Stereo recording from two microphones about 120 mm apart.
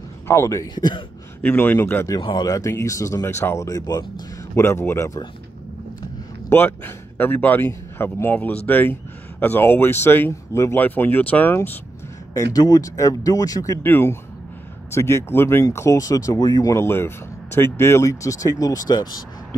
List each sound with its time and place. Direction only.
0.3 s speech: 25° left (ahead or behind)
1.4 s speech: 15° left (ahead or behind)
2.0 s speech: 35° left (ahead or behind)
6.5 s speech: 15° left (ahead or behind)
12.4 s speech: 30° left (ahead or behind)
13.8 s speech: 20° left (ahead or behind)